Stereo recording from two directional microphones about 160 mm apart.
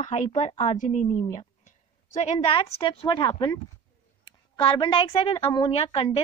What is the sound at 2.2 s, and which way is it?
A woman's voice, 40° left (ahead or behind).